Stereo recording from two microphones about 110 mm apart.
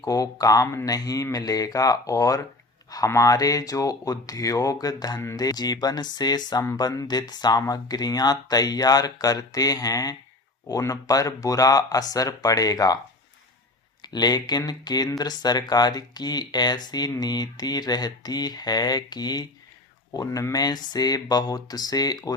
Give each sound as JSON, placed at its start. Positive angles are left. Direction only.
{"t": 0.0, "sound": "speech", "side_deg": 35}
{"t": 5.2, "sound": "speech", "side_deg": 25}
{"t": 5.5, "sound": "speech", "side_deg": 35}
{"t": 14.0, "sound": "speech", "side_deg": 40}